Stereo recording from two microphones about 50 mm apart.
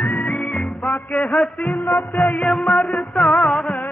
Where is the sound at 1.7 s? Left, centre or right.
Left.